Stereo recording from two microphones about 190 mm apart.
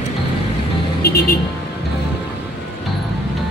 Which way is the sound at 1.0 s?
55° left (ahead or behind).